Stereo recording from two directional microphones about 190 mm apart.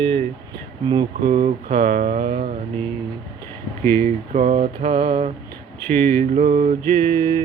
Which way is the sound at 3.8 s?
15° left (ahead or behind).